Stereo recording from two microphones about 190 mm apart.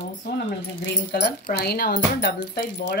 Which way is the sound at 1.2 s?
55° left (ahead or behind).